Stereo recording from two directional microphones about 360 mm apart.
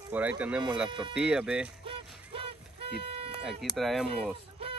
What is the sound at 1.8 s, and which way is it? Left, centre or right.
Vehicle, centre.